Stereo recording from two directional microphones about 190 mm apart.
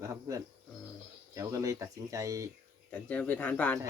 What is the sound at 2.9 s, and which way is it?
Speech, 10° left (ahead or behind).